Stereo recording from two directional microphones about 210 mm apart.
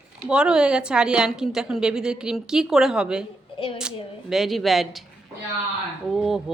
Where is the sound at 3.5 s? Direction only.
25° left (ahead or behind).